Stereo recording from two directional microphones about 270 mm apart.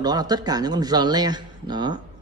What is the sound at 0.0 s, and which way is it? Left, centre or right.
A man's voice, centre.